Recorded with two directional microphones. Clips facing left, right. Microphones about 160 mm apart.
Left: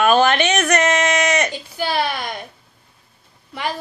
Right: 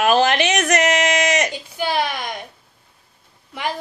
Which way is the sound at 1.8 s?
15° right (ahead or behind).